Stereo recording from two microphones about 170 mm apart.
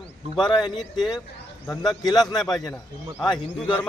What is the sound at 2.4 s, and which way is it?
Speech, centre (ahead or behind).